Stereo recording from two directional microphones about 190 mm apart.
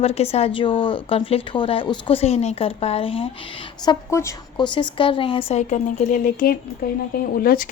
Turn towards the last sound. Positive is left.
turn(degrees=50)  # may be behind; listen again after turning